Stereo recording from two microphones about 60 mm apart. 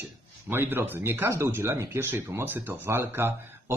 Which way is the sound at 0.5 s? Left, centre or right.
Right.